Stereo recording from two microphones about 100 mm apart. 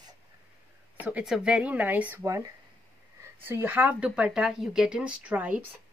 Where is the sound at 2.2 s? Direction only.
35° right (ahead or behind).